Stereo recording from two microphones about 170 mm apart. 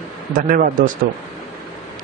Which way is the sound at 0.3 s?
55° right (ahead or behind).